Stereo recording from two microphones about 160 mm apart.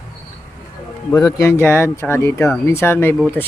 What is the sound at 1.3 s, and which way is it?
Speech, 15° left (ahead or behind).